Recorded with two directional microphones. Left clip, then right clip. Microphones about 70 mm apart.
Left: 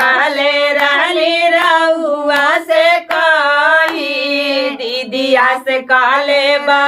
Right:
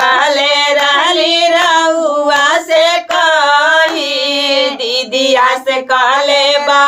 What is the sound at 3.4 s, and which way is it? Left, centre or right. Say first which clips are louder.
Singing: right 2 dB; right.